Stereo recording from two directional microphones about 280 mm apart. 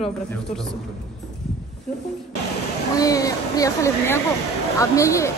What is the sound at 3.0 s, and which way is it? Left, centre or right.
Speech, centre.